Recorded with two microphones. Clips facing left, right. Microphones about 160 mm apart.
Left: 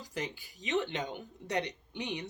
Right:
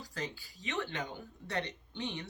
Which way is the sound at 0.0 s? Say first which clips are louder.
Left 2 dB; 20° left (ahead or behind).